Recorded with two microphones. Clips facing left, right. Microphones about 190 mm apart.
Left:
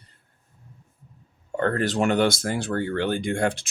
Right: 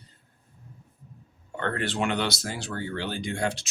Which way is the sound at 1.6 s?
40° left (ahead or behind).